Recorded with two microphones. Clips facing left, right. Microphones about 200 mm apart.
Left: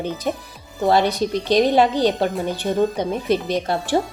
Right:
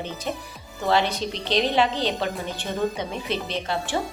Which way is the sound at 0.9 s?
40° left (ahead or behind).